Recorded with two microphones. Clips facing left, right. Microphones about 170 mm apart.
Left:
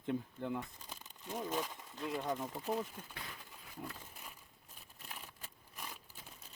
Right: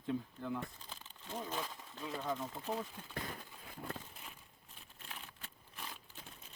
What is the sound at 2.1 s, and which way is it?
Speech, 15° left (ahead or behind).